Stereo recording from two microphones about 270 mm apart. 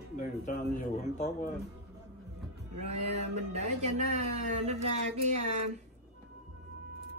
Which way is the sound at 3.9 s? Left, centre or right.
Right.